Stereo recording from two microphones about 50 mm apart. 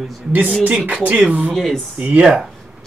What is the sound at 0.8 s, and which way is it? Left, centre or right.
Speech, right.